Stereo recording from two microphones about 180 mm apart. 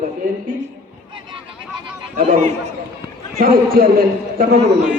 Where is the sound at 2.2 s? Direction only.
35° right (ahead or behind).